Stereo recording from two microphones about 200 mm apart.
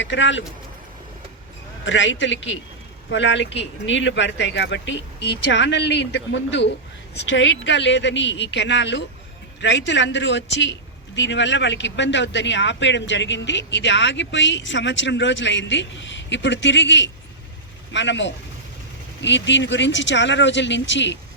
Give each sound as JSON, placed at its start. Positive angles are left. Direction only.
{"t": 0.0, "sound": "speech", "side_deg": 65}
{"t": 1.8, "sound": "speech", "side_deg": 70}